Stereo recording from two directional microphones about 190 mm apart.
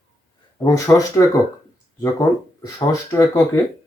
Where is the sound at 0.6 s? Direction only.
15° left (ahead or behind).